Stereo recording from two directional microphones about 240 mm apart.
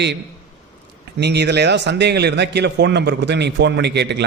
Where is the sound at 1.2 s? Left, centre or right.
Right.